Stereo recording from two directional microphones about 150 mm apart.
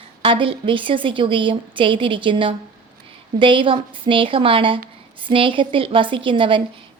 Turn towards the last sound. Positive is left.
turn(degrees=-35)  # may be behind; listen again after turning